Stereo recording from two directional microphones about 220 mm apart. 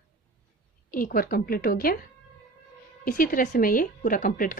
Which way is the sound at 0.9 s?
40° left (ahead or behind).